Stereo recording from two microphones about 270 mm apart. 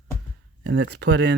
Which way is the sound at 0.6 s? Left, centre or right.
Right.